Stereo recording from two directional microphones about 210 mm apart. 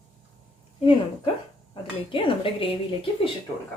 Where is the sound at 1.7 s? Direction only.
25° left (ahead or behind).